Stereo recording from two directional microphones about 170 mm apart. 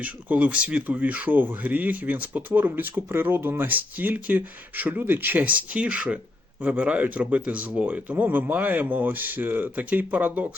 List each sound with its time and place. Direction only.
0.0 s speech: 10° right (ahead or behind)